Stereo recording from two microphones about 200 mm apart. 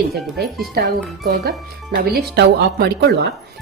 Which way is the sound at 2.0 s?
50° right (ahead or behind).